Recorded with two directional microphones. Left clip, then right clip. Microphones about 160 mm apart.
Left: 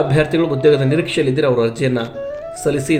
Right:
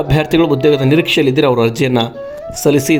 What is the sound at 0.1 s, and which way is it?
A man's voice, 55° right (ahead or behind).